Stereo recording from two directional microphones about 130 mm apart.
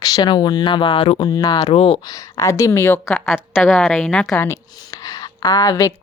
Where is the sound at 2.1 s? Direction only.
25° left (ahead or behind).